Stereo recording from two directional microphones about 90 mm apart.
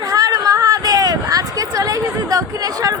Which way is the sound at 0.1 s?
45° right (ahead or behind).